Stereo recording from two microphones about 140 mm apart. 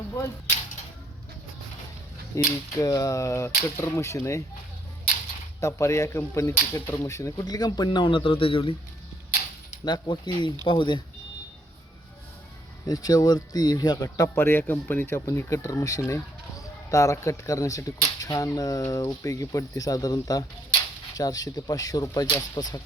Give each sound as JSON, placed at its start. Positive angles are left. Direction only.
{"t": 2.3, "sound": "speech", "side_deg": 25}
{"t": 5.5, "sound": "speech", "side_deg": 20}
{"t": 9.8, "sound": "speech", "side_deg": 30}
{"t": 12.8, "sound": "speech", "side_deg": 25}